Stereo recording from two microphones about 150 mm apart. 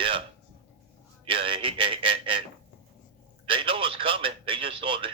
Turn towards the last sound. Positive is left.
turn(degrees=-35)  # may be behind; listen again after turning